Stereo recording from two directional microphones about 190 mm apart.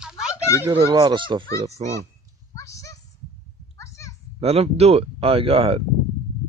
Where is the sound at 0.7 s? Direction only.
25° right (ahead or behind).